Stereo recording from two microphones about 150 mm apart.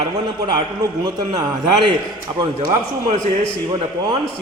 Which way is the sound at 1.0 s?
30° right (ahead or behind).